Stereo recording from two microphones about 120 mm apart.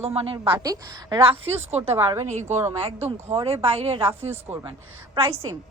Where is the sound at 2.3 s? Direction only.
70° right (ahead or behind).